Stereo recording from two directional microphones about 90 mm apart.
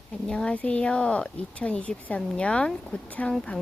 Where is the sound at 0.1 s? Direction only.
10° left (ahead or behind).